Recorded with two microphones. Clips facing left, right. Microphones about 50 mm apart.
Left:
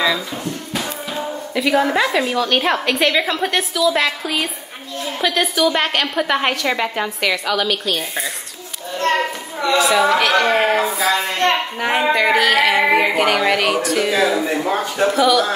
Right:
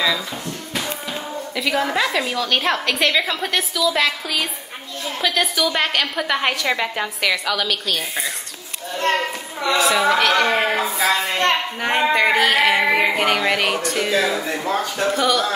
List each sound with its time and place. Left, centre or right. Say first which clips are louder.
1.5 s a woman's voice: left 4 dB; centre
9.8 s a woman's voice: left 2 dB; centre
14.6 s a man's voice: left 3 dB; centre
15.0 s a woman's voice: left 5 dB; centre